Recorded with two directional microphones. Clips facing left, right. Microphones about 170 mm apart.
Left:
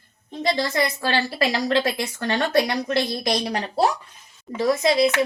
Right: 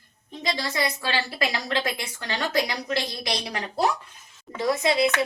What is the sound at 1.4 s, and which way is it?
A woman's voice, 35° left (ahead or behind).